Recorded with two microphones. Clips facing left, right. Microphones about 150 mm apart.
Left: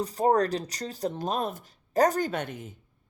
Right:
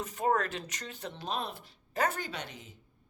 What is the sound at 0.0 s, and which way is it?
Speech, 35° left (ahead or behind).